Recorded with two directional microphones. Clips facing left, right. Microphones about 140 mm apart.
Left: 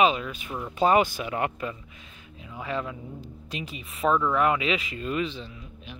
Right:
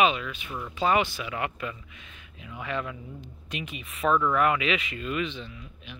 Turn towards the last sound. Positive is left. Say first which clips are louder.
# left 1 dB
turn(degrees=30)  # may be behind; listen again after turning